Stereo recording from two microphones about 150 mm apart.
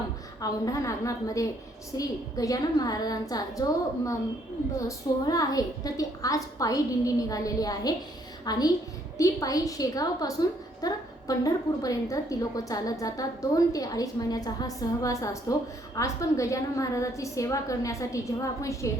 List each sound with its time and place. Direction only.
0.4 s a woman's voice: 25° left (ahead or behind)
4.8 s a woman's voice: 25° left (ahead or behind)